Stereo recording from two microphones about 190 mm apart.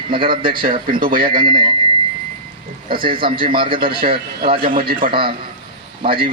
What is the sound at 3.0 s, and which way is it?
A man's voice, 25° right (ahead or behind).